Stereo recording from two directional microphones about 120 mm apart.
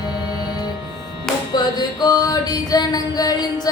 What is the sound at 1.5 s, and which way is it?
Mantra, 35° left (ahead or behind).